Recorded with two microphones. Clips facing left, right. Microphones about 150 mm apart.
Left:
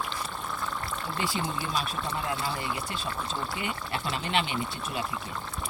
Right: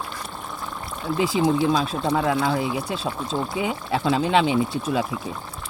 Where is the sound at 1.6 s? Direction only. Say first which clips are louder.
Right 10 dB; 90° right.